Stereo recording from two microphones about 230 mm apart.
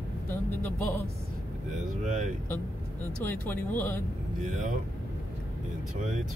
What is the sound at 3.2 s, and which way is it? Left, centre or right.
Speech, centre.